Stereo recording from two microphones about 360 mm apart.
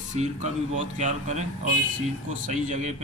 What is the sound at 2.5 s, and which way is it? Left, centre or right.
Speech, right.